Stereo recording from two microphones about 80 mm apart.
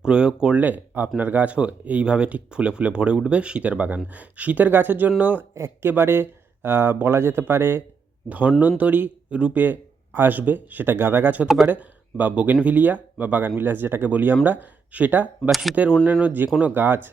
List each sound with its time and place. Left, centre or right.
0.0 s speech: centre
5.5 s speech: right
11.4 s speech: centre
11.7 s speech: centre
15.4 s speech: centre
15.7 s speech: centre